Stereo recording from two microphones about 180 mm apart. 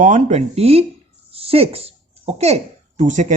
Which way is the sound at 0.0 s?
40° right (ahead or behind).